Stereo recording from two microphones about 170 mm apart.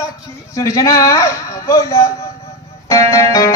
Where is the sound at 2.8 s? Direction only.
20° left (ahead or behind).